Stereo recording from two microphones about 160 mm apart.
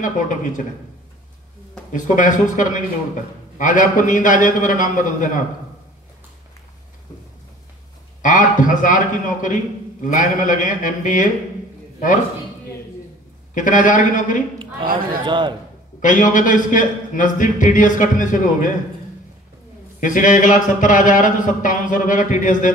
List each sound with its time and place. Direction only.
0.0 s speech: 55° left (ahead or behind)
1.9 s a man's voice: 55° left (ahead or behind)
8.2 s speech: 55° left (ahead or behind)
13.6 s speech: 55° left (ahead or behind)
15.2 s a man's voice: 30° right (ahead or behind)
16.0 s a man's voice: 55° left (ahead or behind)
20.0 s speech: 55° left (ahead or behind)